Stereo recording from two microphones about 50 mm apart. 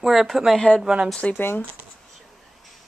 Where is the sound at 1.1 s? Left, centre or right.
Left.